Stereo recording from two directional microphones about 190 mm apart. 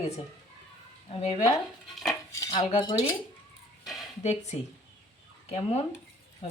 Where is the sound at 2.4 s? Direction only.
20° left (ahead or behind).